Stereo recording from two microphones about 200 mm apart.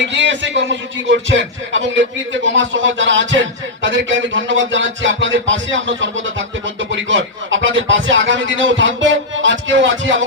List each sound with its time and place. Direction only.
0.0 s a man's voice: 60° right (ahead or behind)